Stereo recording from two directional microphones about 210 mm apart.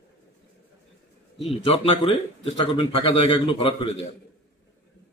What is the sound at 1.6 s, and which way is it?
A man's voice, 25° left (ahead or behind).